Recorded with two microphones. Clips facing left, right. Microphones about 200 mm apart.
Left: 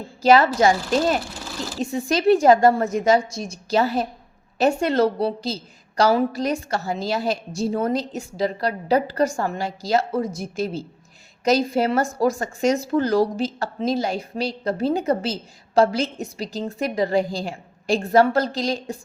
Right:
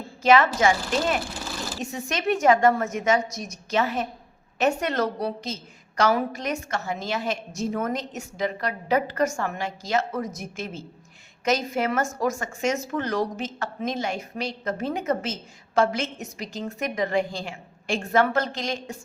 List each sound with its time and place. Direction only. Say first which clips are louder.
0.2 s speech: left 3 dB; 35° left (ahead or behind)
1.5 s speech: left 2 dB; centre (ahead or behind)
1.8 s speech: left 9 dB; 30° left (ahead or behind)